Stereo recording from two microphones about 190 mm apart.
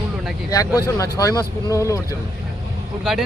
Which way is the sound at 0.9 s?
15° left (ahead or behind).